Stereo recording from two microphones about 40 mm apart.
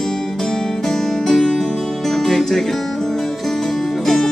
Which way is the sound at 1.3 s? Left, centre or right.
Centre.